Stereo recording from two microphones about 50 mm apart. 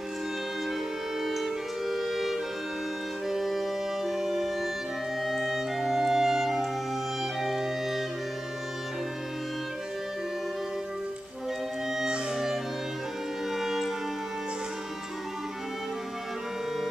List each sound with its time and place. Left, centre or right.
1.2 s music: centre
5.2 s clarinet: centre
7.4 s music: centre
13.5 s music: centre